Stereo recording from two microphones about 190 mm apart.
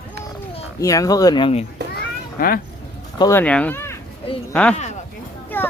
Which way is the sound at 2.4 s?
50° left (ahead or behind).